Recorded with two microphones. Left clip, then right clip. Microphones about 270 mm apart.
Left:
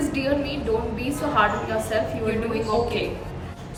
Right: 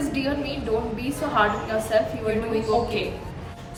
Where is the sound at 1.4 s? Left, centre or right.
Centre.